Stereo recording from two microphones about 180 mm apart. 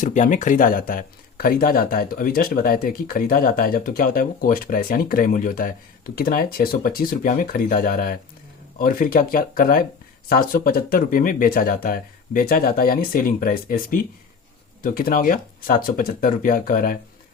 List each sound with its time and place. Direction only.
0.0 s speech: 45° left (ahead or behind)